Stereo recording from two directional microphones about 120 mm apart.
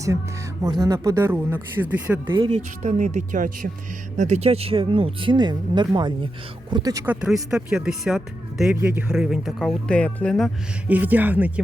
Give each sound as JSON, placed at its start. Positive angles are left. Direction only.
{"t": 0.6, "sound": "speech", "side_deg": -35}
{"t": 2.5, "sound": "speech", "side_deg": -85}
{"t": 4.2, "sound": "speech", "side_deg": -70}
{"t": 7.0, "sound": "speech", "side_deg": -10}
{"t": 8.7, "sound": "speech", "side_deg": -15}
{"t": 10.8, "sound": "speech", "side_deg": -15}